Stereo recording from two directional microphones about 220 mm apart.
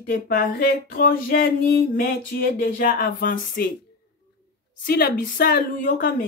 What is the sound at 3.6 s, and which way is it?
Speech, 45° left (ahead or behind).